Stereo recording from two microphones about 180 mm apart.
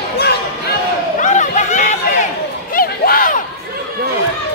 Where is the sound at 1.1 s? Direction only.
45° left (ahead or behind).